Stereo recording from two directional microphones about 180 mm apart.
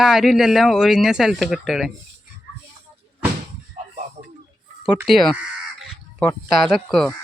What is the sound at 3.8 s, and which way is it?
Music, 35° right (ahead or behind).